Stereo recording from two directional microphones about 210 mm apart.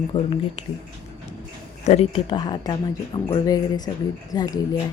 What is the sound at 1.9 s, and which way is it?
Speech, 25° left (ahead or behind).